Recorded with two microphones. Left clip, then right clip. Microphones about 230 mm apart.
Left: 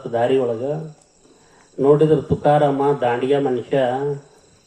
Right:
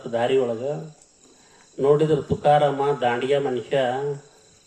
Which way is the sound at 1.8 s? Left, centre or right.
Left.